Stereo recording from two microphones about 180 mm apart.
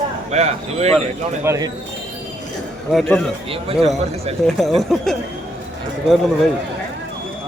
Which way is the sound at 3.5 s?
30° right (ahead or behind).